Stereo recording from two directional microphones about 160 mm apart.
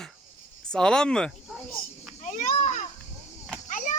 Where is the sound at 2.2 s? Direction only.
50° left (ahead or behind).